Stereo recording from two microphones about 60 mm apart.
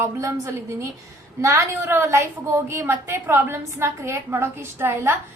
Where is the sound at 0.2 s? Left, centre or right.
Right.